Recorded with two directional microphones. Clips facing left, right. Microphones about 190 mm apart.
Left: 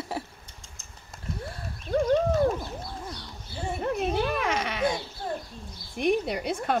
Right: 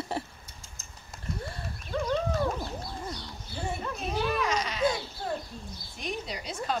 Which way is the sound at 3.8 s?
55° left (ahead or behind).